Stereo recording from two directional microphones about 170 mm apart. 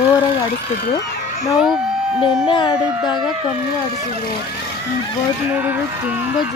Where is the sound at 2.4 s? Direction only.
30° left (ahead or behind).